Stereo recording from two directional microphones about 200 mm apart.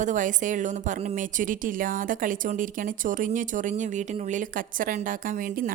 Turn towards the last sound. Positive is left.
turn(degrees=-45)  # may be behind; listen again after turning